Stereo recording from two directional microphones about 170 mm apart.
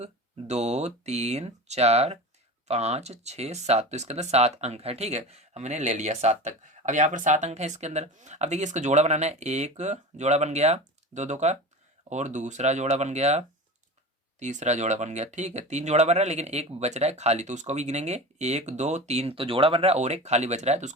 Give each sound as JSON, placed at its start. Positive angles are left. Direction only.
{"t": 0.0, "sound": "speech", "side_deg": -40}